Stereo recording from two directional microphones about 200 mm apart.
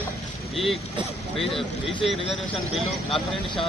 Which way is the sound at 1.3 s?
Centre (ahead or behind).